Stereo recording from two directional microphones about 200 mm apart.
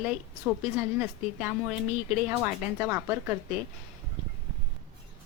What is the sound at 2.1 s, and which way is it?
A woman's voice, 10° right (ahead or behind).